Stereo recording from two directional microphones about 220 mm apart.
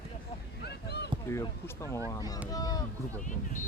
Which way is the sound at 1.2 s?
15° left (ahead or behind).